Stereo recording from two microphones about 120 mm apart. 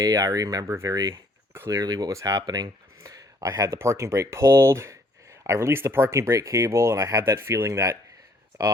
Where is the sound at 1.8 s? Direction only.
35° right (ahead or behind).